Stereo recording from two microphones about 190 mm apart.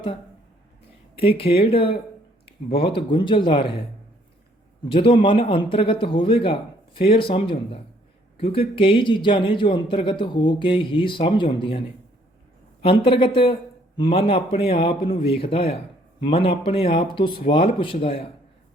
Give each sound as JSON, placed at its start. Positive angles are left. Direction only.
{"t": 1.1, "sound": "speech", "side_deg": 30}
{"t": 4.9, "sound": "speech", "side_deg": 30}
{"t": 12.8, "sound": "speech", "side_deg": 30}